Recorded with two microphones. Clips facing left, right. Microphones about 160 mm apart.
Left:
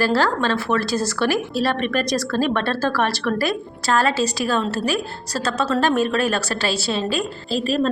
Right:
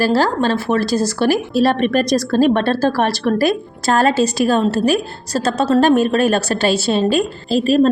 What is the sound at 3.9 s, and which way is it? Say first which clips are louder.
A woman's voice: right 5 dB; 50° right (ahead or behind).